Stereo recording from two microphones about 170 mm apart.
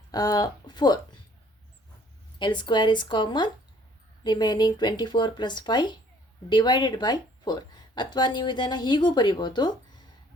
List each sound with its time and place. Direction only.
0.1 s speech: 25° left (ahead or behind)
2.4 s speech: 25° left (ahead or behind)